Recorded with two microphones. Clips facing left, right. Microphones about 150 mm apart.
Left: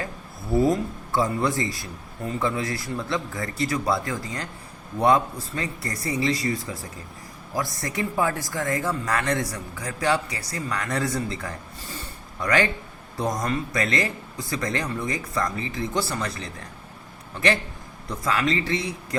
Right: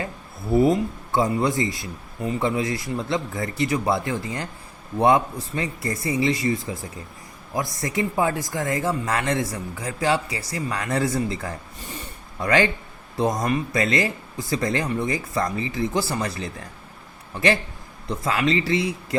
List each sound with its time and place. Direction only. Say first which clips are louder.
0.5 s speech: right 3 dB; 20° right (ahead or behind)
18.1 s speech: right 2 dB; 25° right (ahead or behind)